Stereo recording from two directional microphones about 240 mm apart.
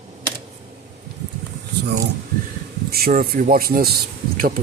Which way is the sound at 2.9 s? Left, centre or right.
Right.